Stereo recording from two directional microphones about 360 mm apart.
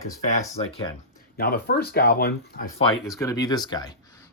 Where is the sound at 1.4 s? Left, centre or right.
Left.